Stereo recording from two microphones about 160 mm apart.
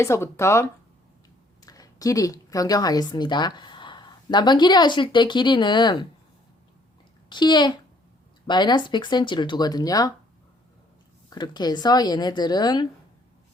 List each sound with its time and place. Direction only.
0.0 s a woman's voice: 15° left (ahead or behind)
7.3 s speech: 30° left (ahead or behind)
11.3 s speech: 25° left (ahead or behind)